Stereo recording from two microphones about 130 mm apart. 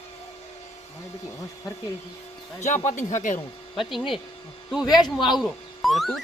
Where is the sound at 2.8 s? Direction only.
80° left.